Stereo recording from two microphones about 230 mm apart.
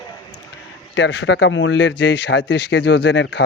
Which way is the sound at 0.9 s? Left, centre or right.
Left.